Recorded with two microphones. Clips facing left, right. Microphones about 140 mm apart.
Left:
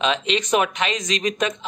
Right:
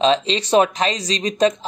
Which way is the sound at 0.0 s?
35° right (ahead or behind).